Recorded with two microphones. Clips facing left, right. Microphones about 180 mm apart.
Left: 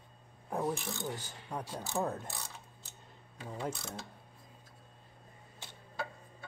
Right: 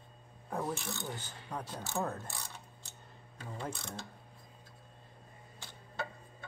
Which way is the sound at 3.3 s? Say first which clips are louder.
Left 3 dB; 10° left (ahead or behind).